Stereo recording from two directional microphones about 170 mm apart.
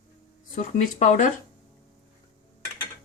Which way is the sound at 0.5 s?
45° left (ahead or behind).